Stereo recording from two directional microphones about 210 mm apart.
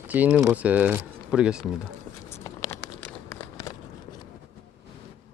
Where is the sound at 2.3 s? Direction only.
10° left (ahead or behind).